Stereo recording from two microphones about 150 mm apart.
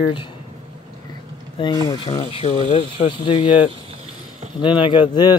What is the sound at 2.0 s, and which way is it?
Speech, 40° left (ahead or behind).